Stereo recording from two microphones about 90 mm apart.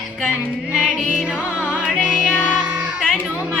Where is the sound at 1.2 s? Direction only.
10° right (ahead or behind).